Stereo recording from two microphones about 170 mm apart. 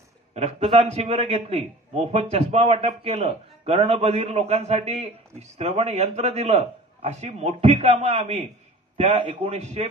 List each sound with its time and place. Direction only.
0.3 s a man's voice: 40° right (ahead or behind)